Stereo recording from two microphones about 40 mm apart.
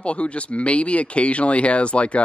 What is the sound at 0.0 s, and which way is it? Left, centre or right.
Speech, left.